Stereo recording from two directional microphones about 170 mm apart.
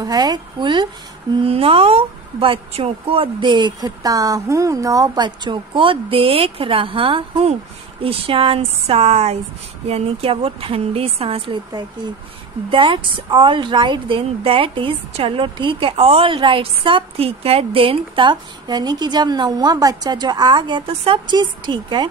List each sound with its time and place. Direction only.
0.0 s a woman's voice: 25° right (ahead or behind)